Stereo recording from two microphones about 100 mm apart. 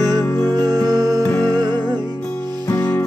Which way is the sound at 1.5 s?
45° right (ahead or behind).